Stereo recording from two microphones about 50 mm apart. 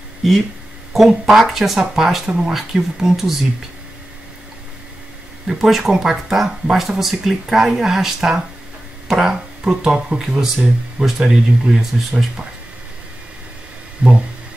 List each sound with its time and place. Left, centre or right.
0.9 s speech: centre
5.5 s speech: centre
14.0 s a sound: right